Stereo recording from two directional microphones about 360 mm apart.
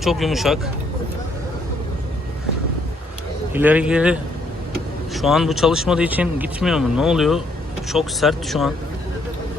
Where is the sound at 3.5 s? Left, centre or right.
Centre.